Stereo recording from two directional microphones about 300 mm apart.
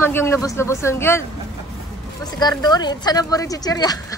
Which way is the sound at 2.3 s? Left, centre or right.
Centre.